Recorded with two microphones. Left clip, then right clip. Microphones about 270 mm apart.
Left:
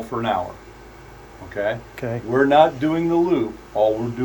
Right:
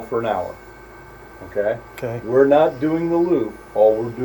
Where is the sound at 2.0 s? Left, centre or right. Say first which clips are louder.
Right 1 dB; centre.